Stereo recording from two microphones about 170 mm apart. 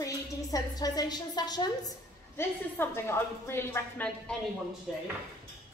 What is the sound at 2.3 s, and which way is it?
A woman's voice, 15° left (ahead or behind).